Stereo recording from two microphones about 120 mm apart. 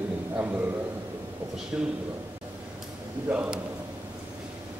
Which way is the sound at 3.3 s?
10° right (ahead or behind).